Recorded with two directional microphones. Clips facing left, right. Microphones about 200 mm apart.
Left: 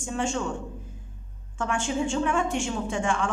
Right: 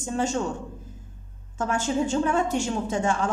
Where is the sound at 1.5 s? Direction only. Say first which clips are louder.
Right 2 dB; 40° right (ahead or behind).